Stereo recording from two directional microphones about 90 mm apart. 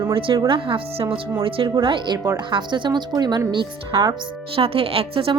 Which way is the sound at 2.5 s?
60° right (ahead or behind).